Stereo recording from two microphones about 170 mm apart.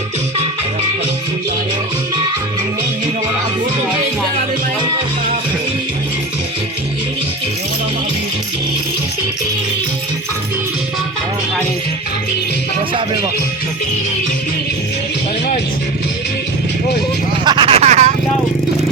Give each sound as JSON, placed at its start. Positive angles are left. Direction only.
{"t": 17.4, "sound": "vehicle", "side_deg": -25}